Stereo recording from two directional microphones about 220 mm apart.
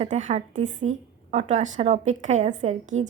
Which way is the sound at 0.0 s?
35° right (ahead or behind).